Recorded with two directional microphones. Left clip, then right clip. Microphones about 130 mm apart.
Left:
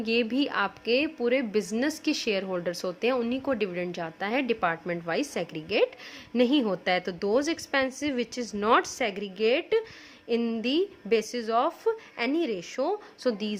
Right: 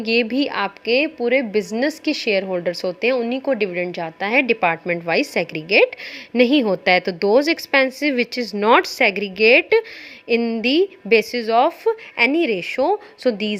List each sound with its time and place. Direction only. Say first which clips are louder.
0.0 s a woman's voice: right 8 dB; 25° right (ahead or behind)